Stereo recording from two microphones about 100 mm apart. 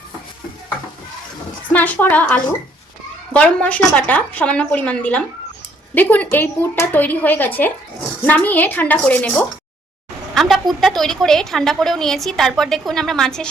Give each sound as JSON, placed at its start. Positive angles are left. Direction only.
{"t": 1.7, "sound": "a woman's voice", "side_deg": 15}
{"t": 10.3, "sound": "a woman's voice", "side_deg": 0}